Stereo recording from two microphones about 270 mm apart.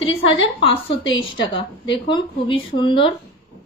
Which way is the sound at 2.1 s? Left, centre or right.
Centre.